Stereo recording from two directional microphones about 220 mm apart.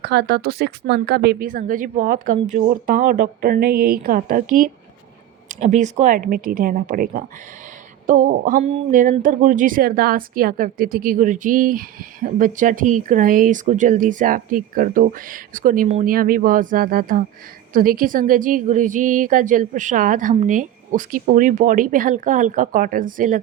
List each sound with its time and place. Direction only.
0.0 s speech: 50° right (ahead or behind)